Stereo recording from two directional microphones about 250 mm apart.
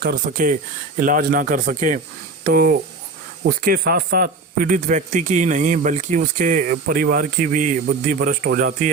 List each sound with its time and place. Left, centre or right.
0.0 s a man's voice: right